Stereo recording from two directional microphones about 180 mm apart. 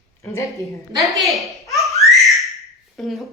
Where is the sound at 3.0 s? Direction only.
Centre (ahead or behind).